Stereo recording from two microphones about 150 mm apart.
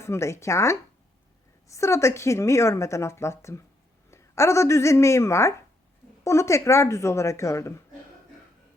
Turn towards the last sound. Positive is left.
turn(degrees=20)  # may be behind; listen again after turning